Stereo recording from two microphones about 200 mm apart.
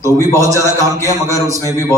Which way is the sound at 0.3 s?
15° right (ahead or behind).